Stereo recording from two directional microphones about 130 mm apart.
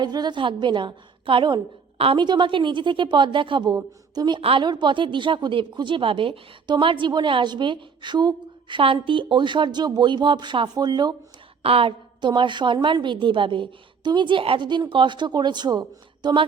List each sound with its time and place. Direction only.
0.0 s a woman's voice: 35° right (ahead or behind)
11.6 s a woman's voice: 45° right (ahead or behind)